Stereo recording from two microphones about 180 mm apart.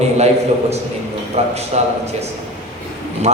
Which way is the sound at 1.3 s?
35° right (ahead or behind).